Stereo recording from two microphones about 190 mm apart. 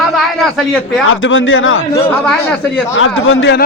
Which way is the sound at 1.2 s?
90° left.